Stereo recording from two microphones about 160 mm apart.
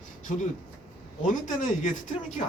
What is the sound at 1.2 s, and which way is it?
Speech, 50° left (ahead or behind).